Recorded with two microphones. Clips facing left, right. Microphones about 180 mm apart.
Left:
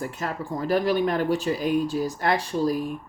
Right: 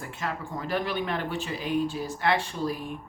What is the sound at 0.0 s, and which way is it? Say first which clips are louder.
Speech: left 4 dB; 40° left (ahead or behind).